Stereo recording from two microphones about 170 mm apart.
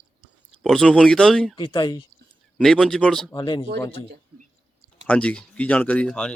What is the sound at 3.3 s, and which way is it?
Speech, 25° left (ahead or behind).